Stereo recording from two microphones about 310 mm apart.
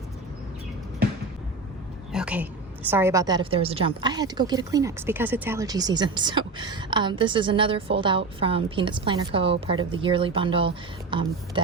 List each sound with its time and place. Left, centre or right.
2.1 s a woman's voice: centre